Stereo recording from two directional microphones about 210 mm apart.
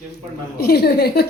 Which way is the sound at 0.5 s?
50° left (ahead or behind).